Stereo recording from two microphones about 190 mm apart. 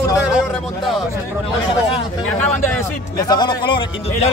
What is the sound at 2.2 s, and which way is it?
A man's voice, 10° left (ahead or behind).